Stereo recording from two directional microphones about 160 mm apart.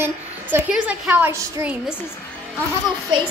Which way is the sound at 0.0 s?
10° right (ahead or behind).